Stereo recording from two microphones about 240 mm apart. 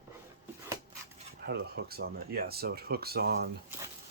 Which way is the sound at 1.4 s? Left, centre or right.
Right.